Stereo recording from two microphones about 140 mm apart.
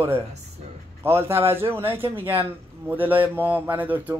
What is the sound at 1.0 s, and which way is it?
A man's voice, 15° right (ahead or behind).